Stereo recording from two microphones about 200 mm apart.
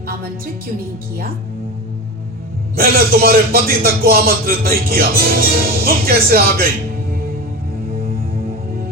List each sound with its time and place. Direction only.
2.7 s speech: 50° right (ahead or behind)